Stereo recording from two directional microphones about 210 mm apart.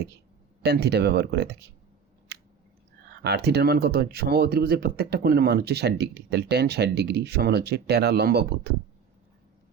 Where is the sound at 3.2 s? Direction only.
50° right (ahead or behind).